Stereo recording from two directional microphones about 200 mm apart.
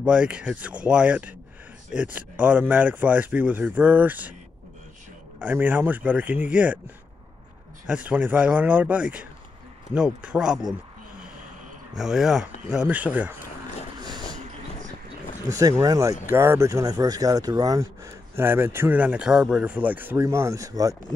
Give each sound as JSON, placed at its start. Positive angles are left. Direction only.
{"t": 0.0, "sound": "speech", "side_deg": -5}
{"t": 5.4, "sound": "speech", "side_deg": -10}
{"t": 7.8, "sound": "speech", "side_deg": -5}
{"t": 12.0, "sound": "speech", "side_deg": 0}
{"t": 13.9, "sound": "a sound", "side_deg": -20}
{"t": 15.4, "sound": "speech", "side_deg": -15}